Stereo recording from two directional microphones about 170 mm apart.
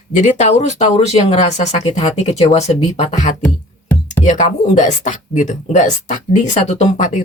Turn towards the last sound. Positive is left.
turn(degrees=45)  # may be behind; listen again after turning